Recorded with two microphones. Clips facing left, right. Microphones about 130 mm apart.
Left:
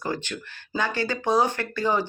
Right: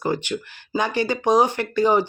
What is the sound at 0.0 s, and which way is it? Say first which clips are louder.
Speech: right 6 dB; 15° right (ahead or behind).